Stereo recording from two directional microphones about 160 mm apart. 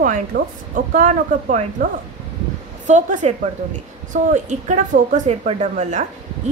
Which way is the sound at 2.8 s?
50° right (ahead or behind).